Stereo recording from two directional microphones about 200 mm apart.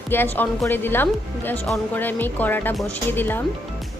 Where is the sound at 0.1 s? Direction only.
10° left (ahead or behind).